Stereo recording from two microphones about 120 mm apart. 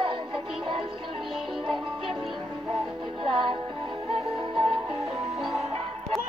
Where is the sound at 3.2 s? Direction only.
40° right (ahead or behind).